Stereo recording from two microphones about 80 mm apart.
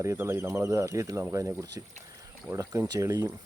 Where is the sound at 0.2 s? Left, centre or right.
Right.